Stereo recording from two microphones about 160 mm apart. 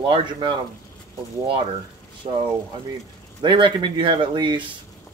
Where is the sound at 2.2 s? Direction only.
40° right (ahead or behind).